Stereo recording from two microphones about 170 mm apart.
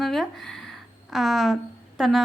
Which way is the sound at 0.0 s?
Centre (ahead or behind).